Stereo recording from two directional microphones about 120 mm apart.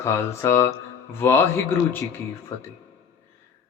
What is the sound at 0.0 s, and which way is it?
A man's voice, 25° left (ahead or behind).